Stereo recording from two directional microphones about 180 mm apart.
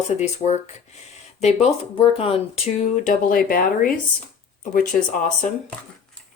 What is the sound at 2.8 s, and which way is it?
Speech, 45° left (ahead or behind).